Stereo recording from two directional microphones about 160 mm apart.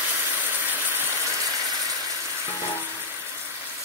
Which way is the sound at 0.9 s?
20° right (ahead or behind).